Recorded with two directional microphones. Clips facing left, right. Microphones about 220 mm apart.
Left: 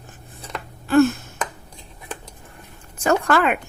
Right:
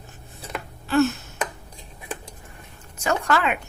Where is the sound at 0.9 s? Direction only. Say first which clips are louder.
Left 4 dB; 50° left (ahead or behind).